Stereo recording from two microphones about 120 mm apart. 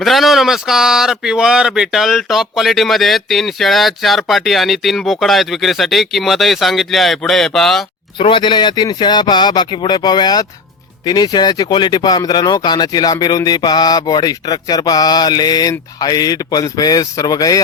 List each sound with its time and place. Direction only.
0.0 s speech: centre (ahead or behind)
8.2 s speech: 45° left (ahead or behind)